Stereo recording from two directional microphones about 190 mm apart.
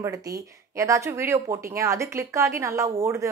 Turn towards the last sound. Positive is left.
turn(degrees=-15)  # may be behind; listen again after turning